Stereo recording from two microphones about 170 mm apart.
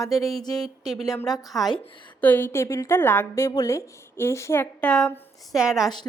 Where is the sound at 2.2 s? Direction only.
10° left (ahead or behind).